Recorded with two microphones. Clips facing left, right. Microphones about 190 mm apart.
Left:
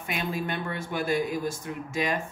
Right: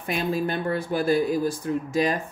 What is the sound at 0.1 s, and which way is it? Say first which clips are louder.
Speech: right 5 dB; 35° right (ahead or behind).